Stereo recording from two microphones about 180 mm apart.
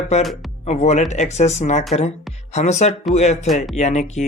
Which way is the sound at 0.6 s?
40° left (ahead or behind).